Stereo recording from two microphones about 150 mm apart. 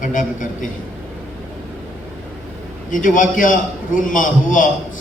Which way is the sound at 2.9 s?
60° left (ahead or behind).